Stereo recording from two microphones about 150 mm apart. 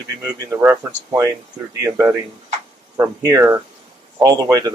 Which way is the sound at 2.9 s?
15° right (ahead or behind).